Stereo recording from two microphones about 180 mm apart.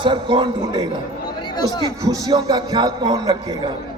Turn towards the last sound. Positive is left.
turn(degrees=-25)  # may be behind; listen again after turning